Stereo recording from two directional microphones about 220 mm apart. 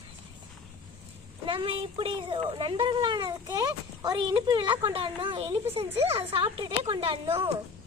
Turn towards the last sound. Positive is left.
turn(degrees=-25)  # may be behind; listen again after turning